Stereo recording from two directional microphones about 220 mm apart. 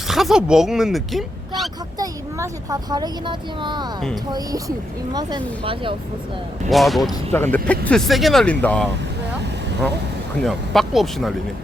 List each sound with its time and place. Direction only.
0.1 s speech: centre (ahead or behind)
2.0 s speech: 15° right (ahead or behind)
6.7 s speech: centre (ahead or behind)
10.4 s speech: centre (ahead or behind)